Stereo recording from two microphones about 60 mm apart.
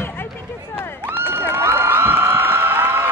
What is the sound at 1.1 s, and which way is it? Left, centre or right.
Cheering, right.